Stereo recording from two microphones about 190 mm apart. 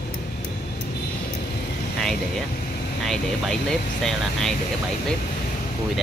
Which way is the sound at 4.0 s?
Centre (ahead or behind).